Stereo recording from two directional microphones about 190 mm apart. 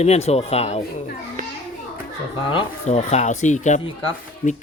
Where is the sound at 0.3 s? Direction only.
35° left (ahead or behind).